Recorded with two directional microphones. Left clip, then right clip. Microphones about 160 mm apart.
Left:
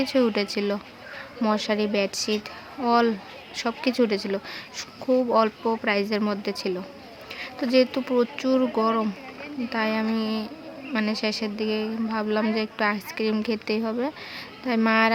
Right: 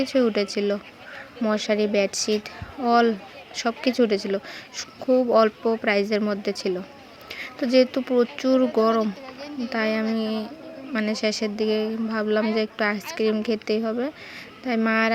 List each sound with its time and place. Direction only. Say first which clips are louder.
0.0 s a woman's voice: right 1 dB; 10° right (ahead or behind)